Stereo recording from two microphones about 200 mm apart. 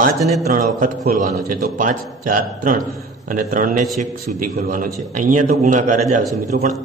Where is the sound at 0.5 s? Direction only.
45° right (ahead or behind).